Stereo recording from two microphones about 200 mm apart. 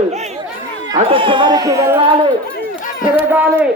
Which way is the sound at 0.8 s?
25° right (ahead or behind).